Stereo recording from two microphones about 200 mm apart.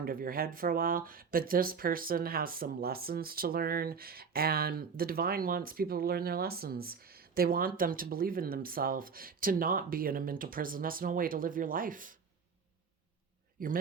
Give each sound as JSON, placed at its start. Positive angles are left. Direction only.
{"t": 0.0, "sound": "speech", "side_deg": -45}
{"t": 13.6, "sound": "speech", "side_deg": -45}